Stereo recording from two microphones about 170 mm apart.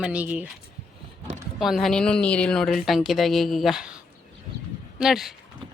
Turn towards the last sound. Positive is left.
turn(degrees=0)  # may be behind; listen again after turning